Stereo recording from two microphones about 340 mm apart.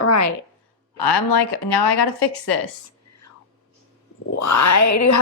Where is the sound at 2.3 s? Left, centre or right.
Left.